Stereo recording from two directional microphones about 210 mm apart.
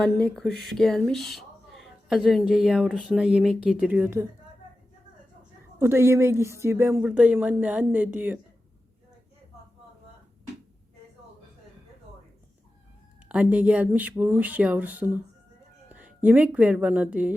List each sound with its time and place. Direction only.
0.0 s speech: centre (ahead or behind)
5.8 s speech: 10° right (ahead or behind)
13.2 s speech: 5° right (ahead or behind)